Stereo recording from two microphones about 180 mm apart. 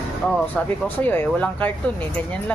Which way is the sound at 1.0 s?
10° left (ahead or behind).